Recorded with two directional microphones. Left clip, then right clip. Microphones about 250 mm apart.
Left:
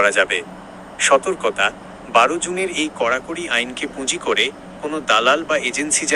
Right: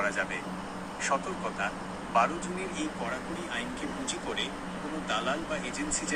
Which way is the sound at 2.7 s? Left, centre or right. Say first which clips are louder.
Left 17 dB; left.